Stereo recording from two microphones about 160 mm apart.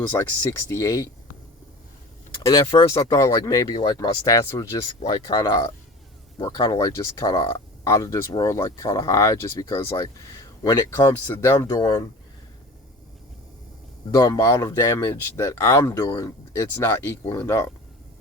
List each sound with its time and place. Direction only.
0.1 s speech: 15° left (ahead or behind)
2.6 s speech: 25° left (ahead or behind)
4.3 s speech: 20° left (ahead or behind)
14.1 s speech: 20° left (ahead or behind)